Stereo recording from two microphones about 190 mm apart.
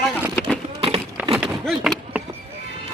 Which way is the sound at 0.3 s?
10° left (ahead or behind).